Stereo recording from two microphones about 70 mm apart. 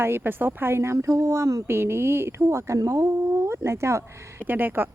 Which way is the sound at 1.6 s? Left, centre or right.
Right.